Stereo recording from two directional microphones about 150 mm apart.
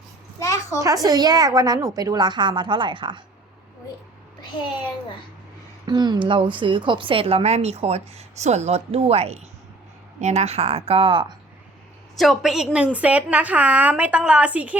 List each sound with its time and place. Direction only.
0.3 s a sound: 20° left (ahead or behind)
0.8 s a woman's voice: 25° right (ahead or behind)
5.8 s a woman's voice: 30° right (ahead or behind)
12.1 s a woman's voice: centre (ahead or behind)